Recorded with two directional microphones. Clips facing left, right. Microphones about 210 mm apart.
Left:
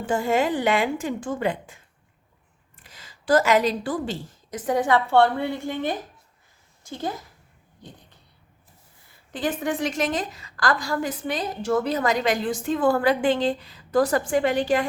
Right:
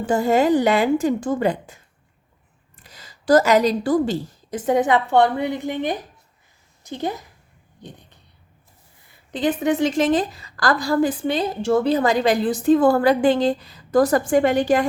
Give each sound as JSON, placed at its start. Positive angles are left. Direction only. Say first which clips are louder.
{"t": 0.0, "sound": "a woman's voice", "louder": "right 5 dB", "side_deg": -40}
{"t": 2.8, "sound": "a woman's voice", "louder": "right 5 dB", "side_deg": -40}
{"t": 4.6, "sound": "a woman's voice", "louder": "right 3 dB", "side_deg": -20}
{"t": 9.3, "sound": "a woman's voice", "louder": "right 6 dB", "side_deg": -20}